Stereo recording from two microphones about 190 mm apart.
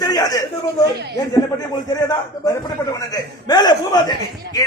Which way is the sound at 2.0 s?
20° left (ahead or behind).